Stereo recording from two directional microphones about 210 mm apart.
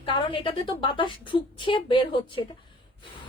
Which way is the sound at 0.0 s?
25° left (ahead or behind).